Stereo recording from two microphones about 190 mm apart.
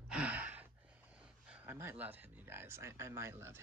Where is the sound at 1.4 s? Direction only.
10° right (ahead or behind).